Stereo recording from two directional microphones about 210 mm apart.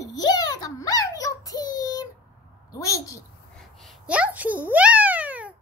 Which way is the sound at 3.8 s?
5° right (ahead or behind).